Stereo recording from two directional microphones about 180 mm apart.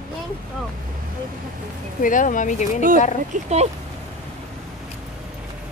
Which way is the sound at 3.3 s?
35° right (ahead or behind).